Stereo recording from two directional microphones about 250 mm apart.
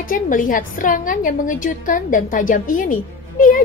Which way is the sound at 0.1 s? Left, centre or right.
Left.